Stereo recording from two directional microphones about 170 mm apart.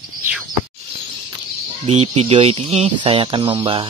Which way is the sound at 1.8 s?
40° right (ahead or behind).